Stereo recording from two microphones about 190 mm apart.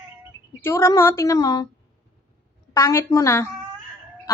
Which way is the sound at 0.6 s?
15° left (ahead or behind).